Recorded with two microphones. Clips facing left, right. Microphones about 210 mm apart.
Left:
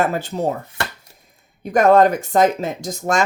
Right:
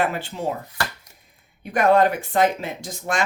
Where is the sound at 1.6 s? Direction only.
45° left (ahead or behind).